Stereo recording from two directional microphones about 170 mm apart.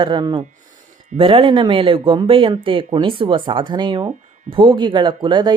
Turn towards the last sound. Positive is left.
turn(degrees=-25)  # may be behind; listen again after turning